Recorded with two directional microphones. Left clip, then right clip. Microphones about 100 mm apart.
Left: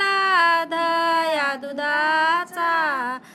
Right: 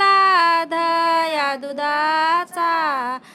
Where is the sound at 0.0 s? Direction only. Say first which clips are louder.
Right 4 dB; 25° right (ahead or behind).